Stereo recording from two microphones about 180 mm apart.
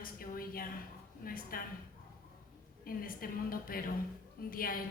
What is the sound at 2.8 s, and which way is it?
A woman's voice, 55° left (ahead or behind).